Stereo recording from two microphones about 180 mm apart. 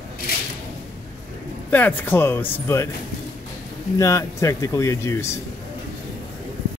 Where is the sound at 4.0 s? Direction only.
15° left (ahead or behind).